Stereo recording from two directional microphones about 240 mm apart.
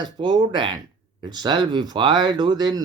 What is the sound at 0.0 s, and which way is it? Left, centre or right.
Speech, centre.